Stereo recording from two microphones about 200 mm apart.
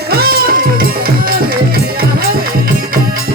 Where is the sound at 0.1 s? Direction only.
50° right (ahead or behind).